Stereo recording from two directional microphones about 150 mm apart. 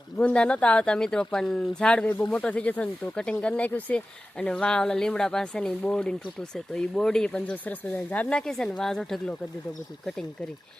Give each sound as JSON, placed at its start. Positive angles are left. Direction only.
{"t": 0.2, "sound": "speech", "side_deg": 5}